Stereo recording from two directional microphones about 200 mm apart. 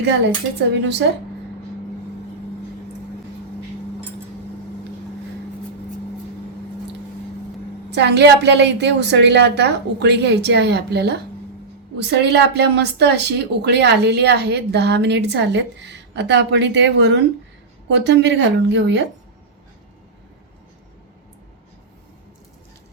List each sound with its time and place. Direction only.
0.8 s speech: 60° right (ahead or behind)
7.9 s speech: 60° right (ahead or behind)